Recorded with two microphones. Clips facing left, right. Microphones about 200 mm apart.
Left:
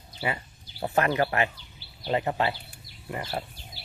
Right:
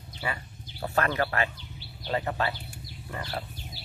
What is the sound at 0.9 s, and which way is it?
Speech, 15° left (ahead or behind).